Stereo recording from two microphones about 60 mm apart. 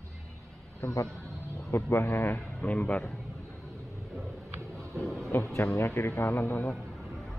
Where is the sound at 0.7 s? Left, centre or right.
Left.